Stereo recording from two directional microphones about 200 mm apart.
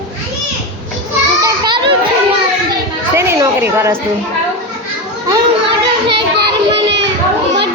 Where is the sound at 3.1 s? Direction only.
15° right (ahead or behind).